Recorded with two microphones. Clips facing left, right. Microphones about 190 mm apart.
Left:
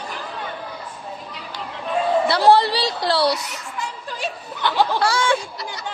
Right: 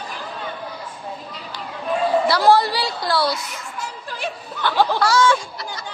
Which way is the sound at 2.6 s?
75° left (ahead or behind).